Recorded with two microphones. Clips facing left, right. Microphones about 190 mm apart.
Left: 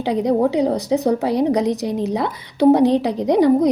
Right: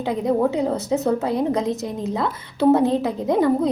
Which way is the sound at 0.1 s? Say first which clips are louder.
Left 3 dB; 20° left (ahead or behind).